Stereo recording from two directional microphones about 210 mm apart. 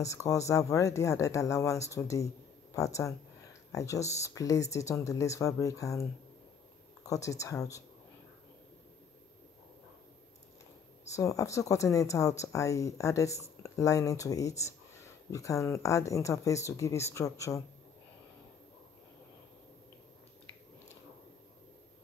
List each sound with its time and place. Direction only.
0.0 s speech: 15° left (ahead or behind)
11.1 s speech: 15° left (ahead or behind)